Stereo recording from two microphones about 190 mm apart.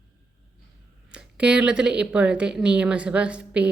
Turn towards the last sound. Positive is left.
turn(degrees=-5)  # may be behind; listen again after turning